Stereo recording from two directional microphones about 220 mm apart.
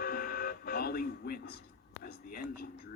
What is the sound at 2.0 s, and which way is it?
Whispering, 45° left (ahead or behind).